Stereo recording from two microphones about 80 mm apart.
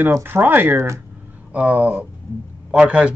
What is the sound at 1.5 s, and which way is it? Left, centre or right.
Speech, centre.